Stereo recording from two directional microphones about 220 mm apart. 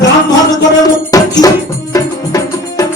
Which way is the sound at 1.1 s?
15° left (ahead or behind).